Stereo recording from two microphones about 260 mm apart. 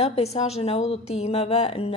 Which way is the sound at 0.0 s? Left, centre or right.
Left.